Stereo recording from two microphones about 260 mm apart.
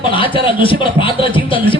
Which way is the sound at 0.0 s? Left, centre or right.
Centre.